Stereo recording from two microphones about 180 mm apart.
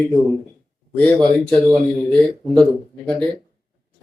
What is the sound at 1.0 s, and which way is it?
Speech, 5° left (ahead or behind).